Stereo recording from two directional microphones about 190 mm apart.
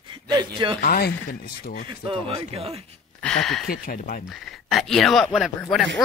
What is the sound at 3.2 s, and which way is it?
Speech, 5° left (ahead or behind).